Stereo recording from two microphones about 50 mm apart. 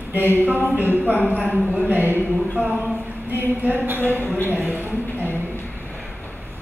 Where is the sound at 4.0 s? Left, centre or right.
Left.